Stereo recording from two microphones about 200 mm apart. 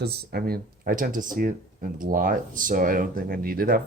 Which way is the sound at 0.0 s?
55° right (ahead or behind).